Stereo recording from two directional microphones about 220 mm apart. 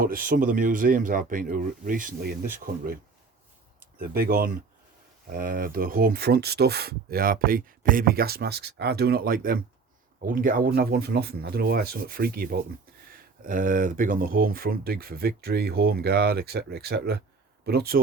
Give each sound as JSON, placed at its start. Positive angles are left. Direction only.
{"t": 0.0, "sound": "speech", "side_deg": -40}
{"t": 4.1, "sound": "speech", "side_deg": -45}